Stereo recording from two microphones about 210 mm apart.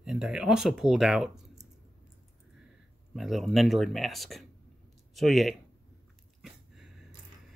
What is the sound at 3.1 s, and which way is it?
Speech, centre (ahead or behind).